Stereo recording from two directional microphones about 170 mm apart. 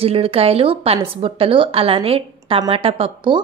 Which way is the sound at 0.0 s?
35° right (ahead or behind).